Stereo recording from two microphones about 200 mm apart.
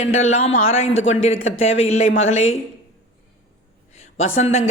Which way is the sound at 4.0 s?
85° left.